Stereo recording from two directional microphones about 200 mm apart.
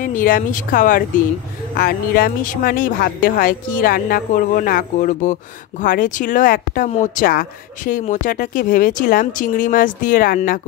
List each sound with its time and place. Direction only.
0.0 s speech: 45° left (ahead or behind)